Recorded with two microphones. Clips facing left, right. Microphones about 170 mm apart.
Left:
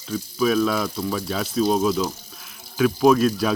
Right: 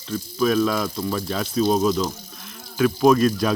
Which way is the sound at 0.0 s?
5° left (ahead or behind).